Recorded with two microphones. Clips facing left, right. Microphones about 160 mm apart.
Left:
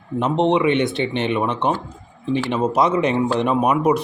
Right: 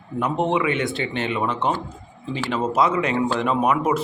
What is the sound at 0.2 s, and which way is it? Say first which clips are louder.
Speech: left 4 dB; 20° left (ahead or behind).